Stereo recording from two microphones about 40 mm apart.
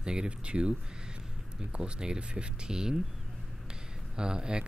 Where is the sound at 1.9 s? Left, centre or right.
Right.